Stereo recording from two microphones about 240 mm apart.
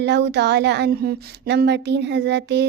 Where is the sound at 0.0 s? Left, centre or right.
Right.